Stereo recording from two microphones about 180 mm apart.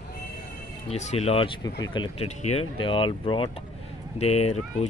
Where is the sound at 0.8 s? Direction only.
35° left (ahead or behind).